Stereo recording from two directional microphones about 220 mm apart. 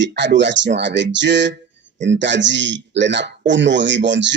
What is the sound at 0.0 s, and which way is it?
Speech, 50° right (ahead or behind).